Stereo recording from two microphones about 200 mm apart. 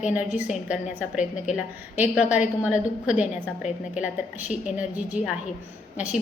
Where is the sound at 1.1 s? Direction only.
40° left (ahead or behind).